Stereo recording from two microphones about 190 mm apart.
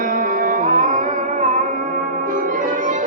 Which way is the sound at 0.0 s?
45° right (ahead or behind).